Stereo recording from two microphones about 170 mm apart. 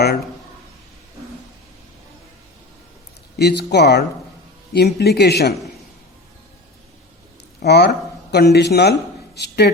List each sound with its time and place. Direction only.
3.3 s speech: 75° left (ahead or behind)
7.6 s speech: 75° left (ahead or behind)